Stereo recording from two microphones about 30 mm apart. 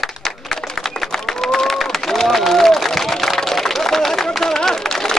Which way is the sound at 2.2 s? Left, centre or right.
Centre.